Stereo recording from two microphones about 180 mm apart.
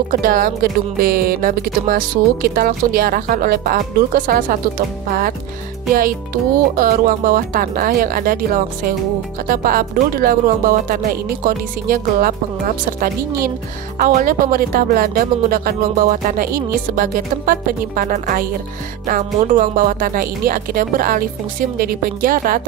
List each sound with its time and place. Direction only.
0.1 s speech: 50° right (ahead or behind)